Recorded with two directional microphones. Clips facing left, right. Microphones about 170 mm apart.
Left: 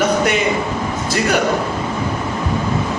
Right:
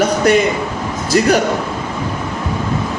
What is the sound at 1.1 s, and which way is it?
Speech, 40° right (ahead or behind).